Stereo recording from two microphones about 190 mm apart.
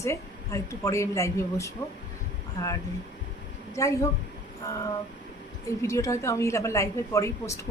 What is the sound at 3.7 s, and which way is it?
Speech, 15° left (ahead or behind).